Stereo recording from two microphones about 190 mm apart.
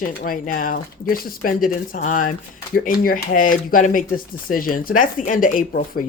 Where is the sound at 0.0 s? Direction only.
45° left (ahead or behind).